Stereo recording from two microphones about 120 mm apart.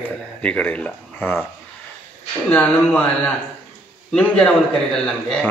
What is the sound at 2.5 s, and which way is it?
A man's voice, 10° left (ahead or behind).